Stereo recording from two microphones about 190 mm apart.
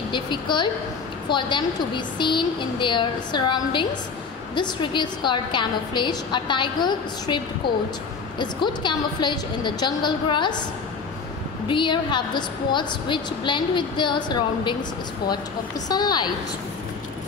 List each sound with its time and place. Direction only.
0.1 s a woman's voice: 25° left (ahead or behind)
11.6 s a woman's voice: 25° left (ahead or behind)
15.9 s a woman's voice: 20° left (ahead or behind)